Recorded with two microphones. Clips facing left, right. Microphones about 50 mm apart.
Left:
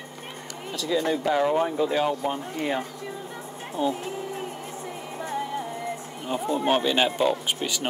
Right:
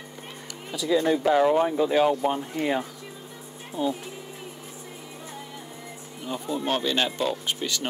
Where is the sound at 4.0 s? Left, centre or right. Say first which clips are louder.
Left 7 dB; left.